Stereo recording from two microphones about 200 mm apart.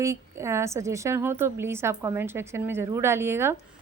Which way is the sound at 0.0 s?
15° right (ahead or behind).